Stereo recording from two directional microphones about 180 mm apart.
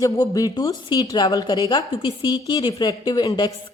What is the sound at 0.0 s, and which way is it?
Speech, 20° left (ahead or behind).